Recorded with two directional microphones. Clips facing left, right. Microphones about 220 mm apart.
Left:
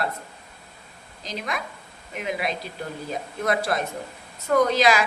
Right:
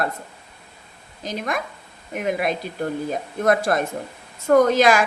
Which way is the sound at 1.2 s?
50° right (ahead or behind).